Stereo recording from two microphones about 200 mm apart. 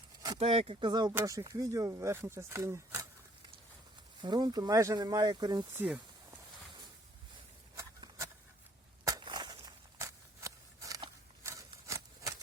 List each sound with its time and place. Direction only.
0.3 s speech: 30° right (ahead or behind); by 3.1 s 15° right (ahead or behind)
4.2 s speech: 20° right (ahead or behind)
7.8 s a sound: 15° right (ahead or behind)
9.0 s walk: 20° right (ahead or behind)